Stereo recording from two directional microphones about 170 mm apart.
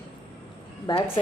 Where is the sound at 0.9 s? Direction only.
30° left (ahead or behind).